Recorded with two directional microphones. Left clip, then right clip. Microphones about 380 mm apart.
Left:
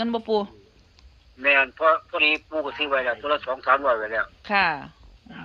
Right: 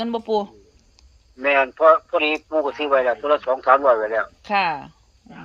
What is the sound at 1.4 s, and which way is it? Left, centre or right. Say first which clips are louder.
A man's voice: right 3 dB; centre.